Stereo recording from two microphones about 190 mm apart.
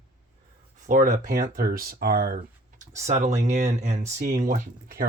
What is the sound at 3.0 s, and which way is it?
Speech, 35° right (ahead or behind).